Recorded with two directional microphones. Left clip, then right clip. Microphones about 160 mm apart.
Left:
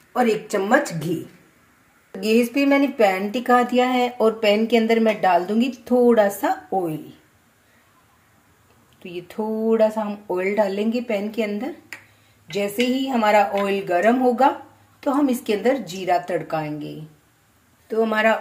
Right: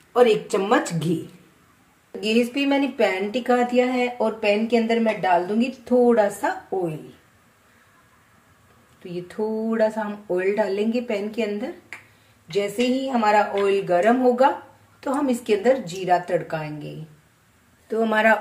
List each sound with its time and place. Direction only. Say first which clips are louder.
0.2 s speech: right 3 dB; 10° left (ahead or behind)
2.1 s speech: left 2 dB; 20° left (ahead or behind)
9.0 s speech: right 1 dB; 15° left (ahead or behind)
17.8 s speech: even; centre (ahead or behind)